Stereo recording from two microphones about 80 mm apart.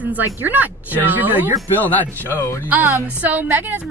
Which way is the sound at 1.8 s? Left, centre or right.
Left.